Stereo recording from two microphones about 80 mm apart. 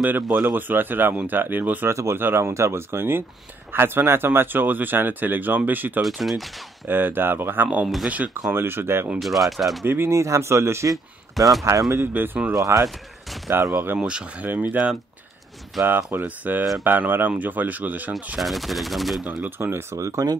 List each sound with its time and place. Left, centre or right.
0.0 s speech: right
1.9 s speech: right
6.0 s speech: centre
6.9 s speech: right
7.8 s speech: centre
8.5 s speech: right
9.2 s speech: centre
9.8 s speech: right
11.3 s speech: centre
11.9 s speech: right
13.9 s speech: centre
15.9 s speech: right
18.4 s speech: centre
19.2 s speech: right